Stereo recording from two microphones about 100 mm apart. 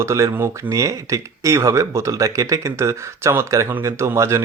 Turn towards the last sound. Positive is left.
turn(degrees=-30)  # may be behind; listen again after turning